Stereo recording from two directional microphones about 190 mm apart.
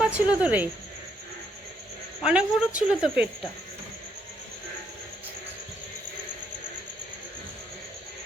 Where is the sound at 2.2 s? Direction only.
5° right (ahead or behind).